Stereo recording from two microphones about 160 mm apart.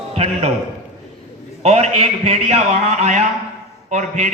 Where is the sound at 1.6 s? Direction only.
40° right (ahead or behind).